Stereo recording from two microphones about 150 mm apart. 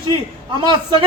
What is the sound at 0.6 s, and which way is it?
Speech, 30° right (ahead or behind).